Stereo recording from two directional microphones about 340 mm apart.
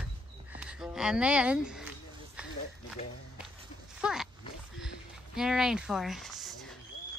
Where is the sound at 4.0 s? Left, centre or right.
Centre.